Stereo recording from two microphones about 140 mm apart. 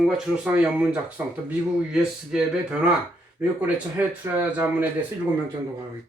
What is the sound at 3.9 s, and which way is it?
Speech, 15° right (ahead or behind).